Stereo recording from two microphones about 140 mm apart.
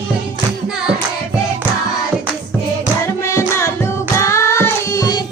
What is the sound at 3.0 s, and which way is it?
Music, 20° left (ahead or behind).